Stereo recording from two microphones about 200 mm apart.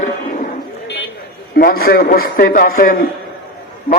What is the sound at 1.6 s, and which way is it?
A man's voice, 45° left (ahead or behind).